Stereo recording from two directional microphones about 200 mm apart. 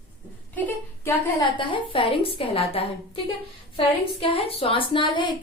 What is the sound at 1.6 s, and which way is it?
Speech, 25° left (ahead or behind).